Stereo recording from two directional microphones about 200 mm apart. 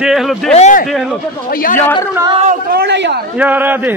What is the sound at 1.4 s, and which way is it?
Speech, 45° left (ahead or behind).